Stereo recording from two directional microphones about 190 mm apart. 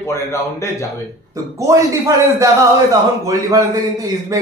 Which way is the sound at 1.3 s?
15° right (ahead or behind).